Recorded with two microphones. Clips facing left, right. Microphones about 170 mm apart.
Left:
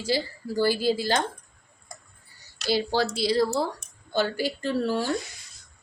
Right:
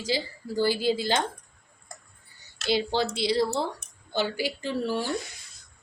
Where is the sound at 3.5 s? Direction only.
40° left (ahead or behind).